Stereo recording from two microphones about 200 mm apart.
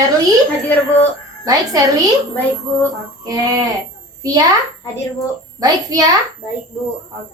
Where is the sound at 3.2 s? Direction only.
20° right (ahead or behind).